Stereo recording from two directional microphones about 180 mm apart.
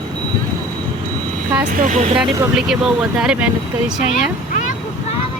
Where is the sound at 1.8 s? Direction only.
45° right (ahead or behind).